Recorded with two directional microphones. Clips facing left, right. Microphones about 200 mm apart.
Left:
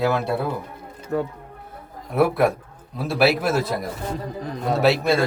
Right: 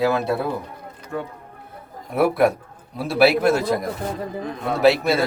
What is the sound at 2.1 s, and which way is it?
A man's voice, centre (ahead or behind).